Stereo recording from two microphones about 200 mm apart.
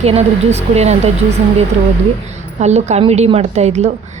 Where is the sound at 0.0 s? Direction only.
30° right (ahead or behind).